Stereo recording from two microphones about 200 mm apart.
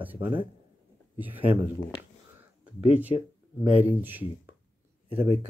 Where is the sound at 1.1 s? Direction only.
10° right (ahead or behind).